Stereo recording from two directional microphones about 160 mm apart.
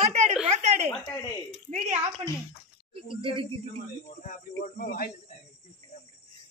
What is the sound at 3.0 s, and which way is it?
Speech, 35° right (ahead or behind).